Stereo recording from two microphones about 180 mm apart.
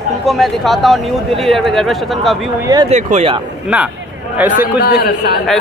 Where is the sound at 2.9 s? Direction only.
40° right (ahead or behind).